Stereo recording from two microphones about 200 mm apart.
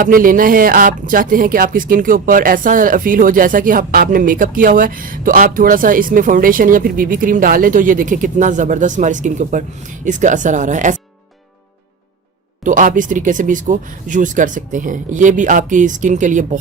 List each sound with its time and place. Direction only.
0.0 s speech: 45° right (ahead or behind)
12.6 s speech: 40° right (ahead or behind)